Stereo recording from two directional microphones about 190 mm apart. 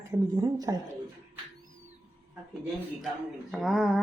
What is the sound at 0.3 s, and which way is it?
Speech, 20° right (ahead or behind).